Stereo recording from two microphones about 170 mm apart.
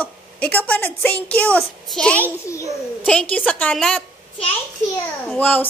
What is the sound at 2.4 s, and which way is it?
A woman's voice, 15° left (ahead or behind).